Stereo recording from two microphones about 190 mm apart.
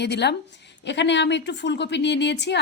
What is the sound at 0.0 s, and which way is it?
A woman's voice, 65° left (ahead or behind).